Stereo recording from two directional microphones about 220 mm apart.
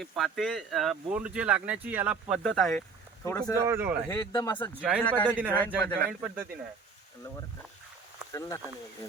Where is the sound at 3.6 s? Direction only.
10° right (ahead or behind).